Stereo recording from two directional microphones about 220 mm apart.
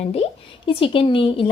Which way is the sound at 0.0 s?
30° left (ahead or behind).